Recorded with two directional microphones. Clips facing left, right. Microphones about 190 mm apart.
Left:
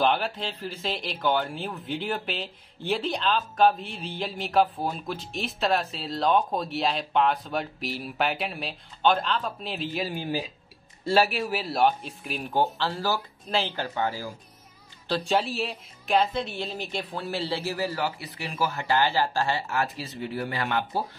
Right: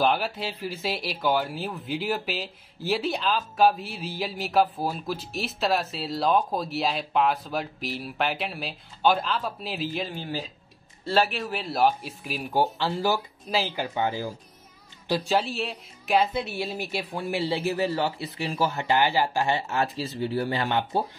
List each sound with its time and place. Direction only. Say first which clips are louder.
0.0 s speech: even; 5° right (ahead or behind)
10.1 s speech: left 3 dB; 15° left (ahead or behind); by 13.2 s 20° right (ahead or behind)
13.5 s a woman's voice: right 1 dB; 5° right (ahead or behind)
15.3 s speech: even; centre (ahead or behind); by 21.0 s 25° right (ahead or behind)